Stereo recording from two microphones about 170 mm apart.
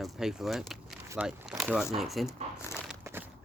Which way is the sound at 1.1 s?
10° right (ahead or behind).